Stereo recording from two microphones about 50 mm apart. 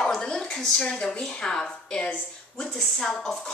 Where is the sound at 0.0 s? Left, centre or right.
Centre.